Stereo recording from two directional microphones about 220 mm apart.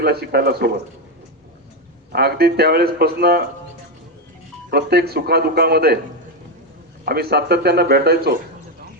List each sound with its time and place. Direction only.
0.0 s speech: 45° right (ahead or behind)
2.1 s speech: 45° right (ahead or behind)
4.7 s speech: 45° right (ahead or behind)
7.0 s speech: 45° right (ahead or behind)